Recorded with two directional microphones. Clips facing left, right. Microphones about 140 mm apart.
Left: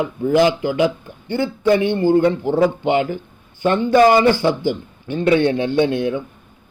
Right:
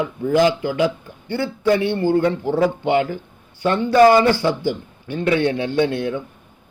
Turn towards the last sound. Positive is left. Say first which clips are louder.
# left 2 dB
turn(degrees=15)  # may be behind; listen again after turning